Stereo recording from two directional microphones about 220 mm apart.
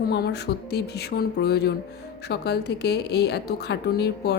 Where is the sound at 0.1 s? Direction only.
50° left (ahead or behind).